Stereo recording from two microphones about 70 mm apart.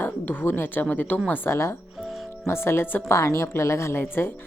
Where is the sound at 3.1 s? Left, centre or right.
Left.